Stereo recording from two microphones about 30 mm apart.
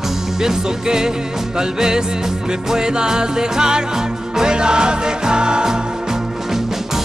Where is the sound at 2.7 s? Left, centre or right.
Right.